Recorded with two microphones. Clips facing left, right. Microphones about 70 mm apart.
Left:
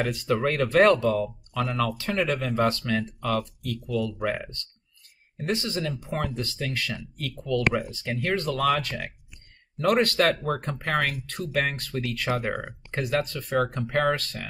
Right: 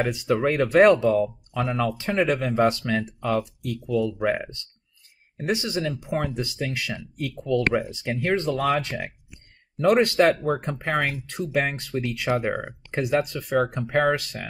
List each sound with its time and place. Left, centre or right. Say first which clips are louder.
0.0 s speech: right 2 dB; centre